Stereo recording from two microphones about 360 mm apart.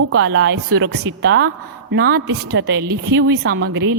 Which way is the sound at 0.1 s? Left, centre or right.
Right.